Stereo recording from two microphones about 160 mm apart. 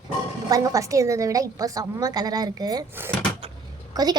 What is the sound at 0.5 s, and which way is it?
A woman's voice, 20° right (ahead or behind).